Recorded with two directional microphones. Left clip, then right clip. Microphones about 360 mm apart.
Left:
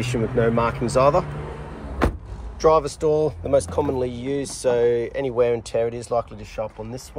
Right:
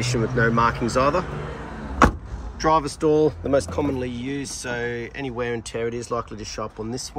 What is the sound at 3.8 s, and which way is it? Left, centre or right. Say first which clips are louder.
Speech: left 2 dB; left.